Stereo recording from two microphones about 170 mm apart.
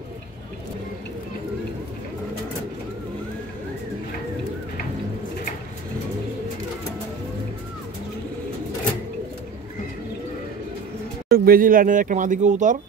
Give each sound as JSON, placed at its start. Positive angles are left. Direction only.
{"t": 11.2, "sound": "speech", "side_deg": -60}